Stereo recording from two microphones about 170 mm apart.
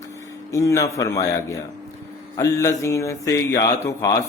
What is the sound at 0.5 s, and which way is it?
Speech, 20° left (ahead or behind).